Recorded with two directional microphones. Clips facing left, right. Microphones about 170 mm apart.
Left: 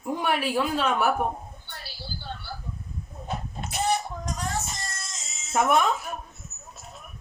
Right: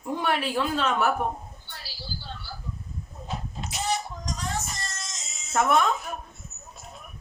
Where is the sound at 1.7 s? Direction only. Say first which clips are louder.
Even; 55° left (ahead or behind).